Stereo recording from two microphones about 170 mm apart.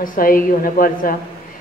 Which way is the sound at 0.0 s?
55° left (ahead or behind).